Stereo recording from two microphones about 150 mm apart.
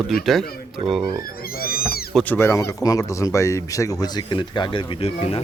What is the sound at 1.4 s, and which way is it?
Cat, 80° left.